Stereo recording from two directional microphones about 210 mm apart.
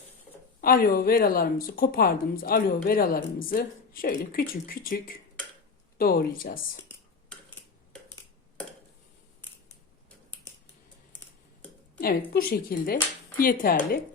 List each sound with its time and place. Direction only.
0.6 s speech: 45° left (ahead or behind)
11.9 s speech: 45° left (ahead or behind)